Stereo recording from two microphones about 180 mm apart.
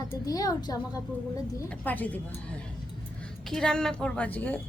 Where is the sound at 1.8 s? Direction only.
10° left (ahead or behind).